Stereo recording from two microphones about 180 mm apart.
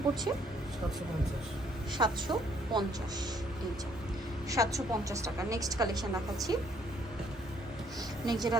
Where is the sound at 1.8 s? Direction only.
25° right (ahead or behind).